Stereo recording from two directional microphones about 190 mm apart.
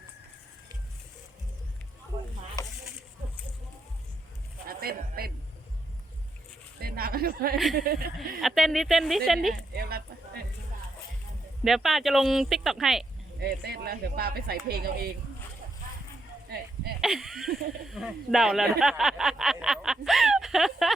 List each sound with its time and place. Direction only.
4.7 s speech: 50° right (ahead or behind)
6.7 s a woman's voice: 55° right (ahead or behind)
8.4 s speech: centre (ahead or behind)
9.7 s a sound: 55° right (ahead or behind)
11.6 s speech: centre (ahead or behind)
13.4 s speech: 55° right (ahead or behind)
16.5 s speech: 60° right (ahead or behind)
17.0 s speech: centre (ahead or behind)